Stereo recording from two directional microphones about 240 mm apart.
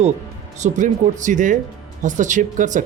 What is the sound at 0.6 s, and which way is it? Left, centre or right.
Speech, right.